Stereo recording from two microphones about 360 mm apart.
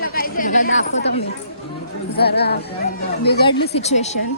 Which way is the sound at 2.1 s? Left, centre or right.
Left.